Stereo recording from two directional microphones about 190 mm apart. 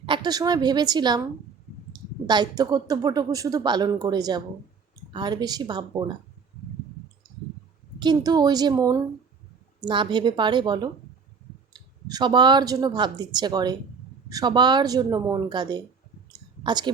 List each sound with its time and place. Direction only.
0.0 s speech: 25° right (ahead or behind)
7.9 s speech: 20° right (ahead or behind)